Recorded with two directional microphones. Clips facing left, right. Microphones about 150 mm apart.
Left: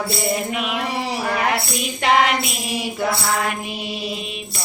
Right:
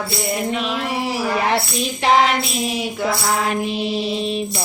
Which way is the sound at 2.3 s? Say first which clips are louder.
Right 2 dB; centre (ahead or behind).